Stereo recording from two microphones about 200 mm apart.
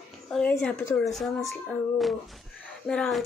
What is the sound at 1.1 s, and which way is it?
Speech, centre (ahead or behind).